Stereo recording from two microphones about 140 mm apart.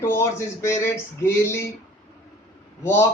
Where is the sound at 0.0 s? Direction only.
20° left (ahead or behind).